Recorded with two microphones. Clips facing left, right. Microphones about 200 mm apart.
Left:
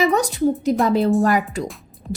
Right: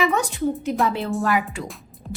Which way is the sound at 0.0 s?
40° left (ahead or behind).